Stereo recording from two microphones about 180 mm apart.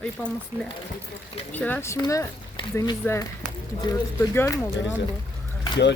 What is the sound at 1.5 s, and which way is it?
Speech, 10° left (ahead or behind).